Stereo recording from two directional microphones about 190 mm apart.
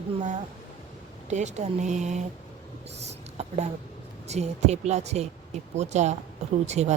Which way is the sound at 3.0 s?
35° right (ahead or behind).